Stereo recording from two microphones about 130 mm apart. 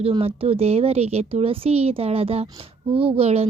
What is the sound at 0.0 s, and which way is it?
A woman's voice, 50° right (ahead or behind).